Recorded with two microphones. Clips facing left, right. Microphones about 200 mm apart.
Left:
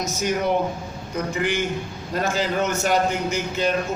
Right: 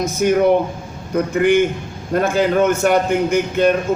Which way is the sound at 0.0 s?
55° right (ahead or behind).